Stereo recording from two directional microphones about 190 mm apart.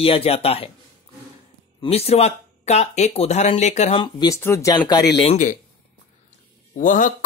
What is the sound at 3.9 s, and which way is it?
Speech, 20° left (ahead or behind).